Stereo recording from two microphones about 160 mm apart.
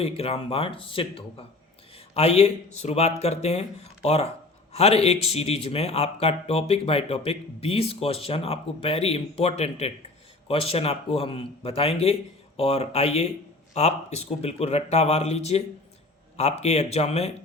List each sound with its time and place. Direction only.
0.0 s speech: 40° left (ahead or behind)